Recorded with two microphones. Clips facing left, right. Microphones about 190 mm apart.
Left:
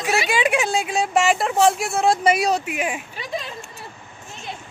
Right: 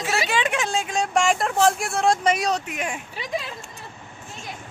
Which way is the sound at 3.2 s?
25° right (ahead or behind).